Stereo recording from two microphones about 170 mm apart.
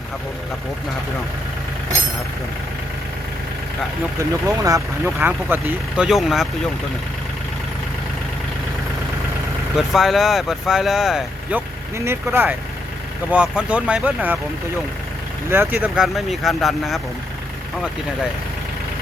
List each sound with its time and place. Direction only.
4.2 s speech: 20° right (ahead or behind); by 6.5 s centre (ahead or behind)
9.7 s speech: centre (ahead or behind)
11.9 s speech: 15° right (ahead or behind)
15.4 s speech: 10° right (ahead or behind)